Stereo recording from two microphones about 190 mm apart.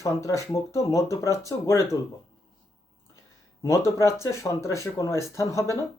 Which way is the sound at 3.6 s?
15° left (ahead or behind).